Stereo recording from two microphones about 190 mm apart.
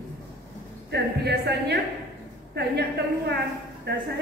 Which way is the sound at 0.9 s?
60° right (ahead or behind).